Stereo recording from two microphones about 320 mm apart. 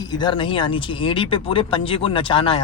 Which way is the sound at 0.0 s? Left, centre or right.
Centre.